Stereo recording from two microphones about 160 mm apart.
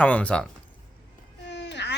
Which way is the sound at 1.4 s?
90° left.